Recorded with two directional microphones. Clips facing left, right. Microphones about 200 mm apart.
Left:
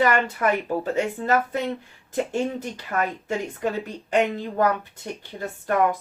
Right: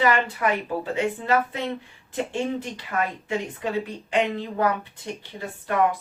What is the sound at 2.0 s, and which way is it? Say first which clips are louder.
Speech: left 2 dB; 45° left (ahead or behind).